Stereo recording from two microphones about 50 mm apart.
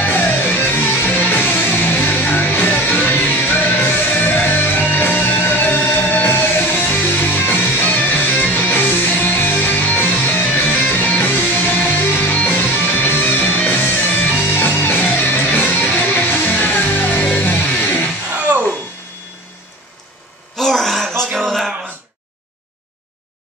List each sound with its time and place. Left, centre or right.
0.0 s music: left
13.4 s music: left
13.7 s music: left
20.5 s gasp: centre
21.4 s a sound: centre